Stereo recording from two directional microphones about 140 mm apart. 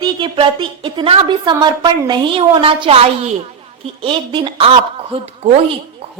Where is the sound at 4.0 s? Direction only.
35° right (ahead or behind).